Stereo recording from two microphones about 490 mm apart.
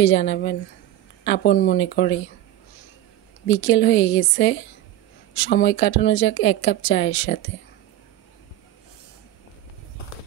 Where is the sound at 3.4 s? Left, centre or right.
Left.